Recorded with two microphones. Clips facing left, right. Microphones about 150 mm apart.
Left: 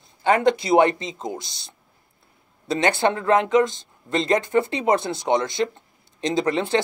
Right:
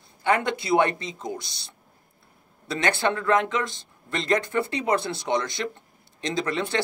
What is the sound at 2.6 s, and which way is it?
Speech, 25° left (ahead or behind).